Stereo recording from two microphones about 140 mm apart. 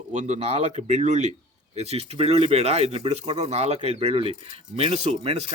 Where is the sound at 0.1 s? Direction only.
55° right (ahead or behind).